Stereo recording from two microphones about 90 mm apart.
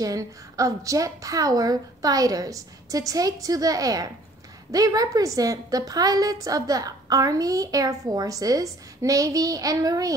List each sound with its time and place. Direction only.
0.0 s a woman's voice: 40° right (ahead or behind)